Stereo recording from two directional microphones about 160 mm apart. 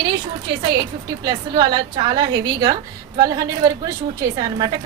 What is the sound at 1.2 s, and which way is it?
A woman's voice, 25° right (ahead or behind).